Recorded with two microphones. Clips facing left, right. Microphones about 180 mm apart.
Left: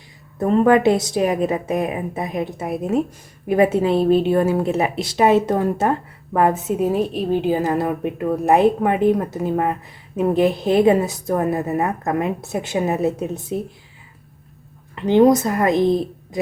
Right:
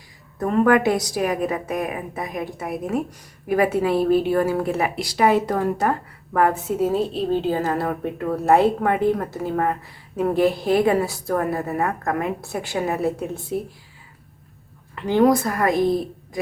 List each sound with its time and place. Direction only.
0.3 s a woman's voice: 25° left (ahead or behind)
14.9 s a woman's voice: 20° left (ahead or behind)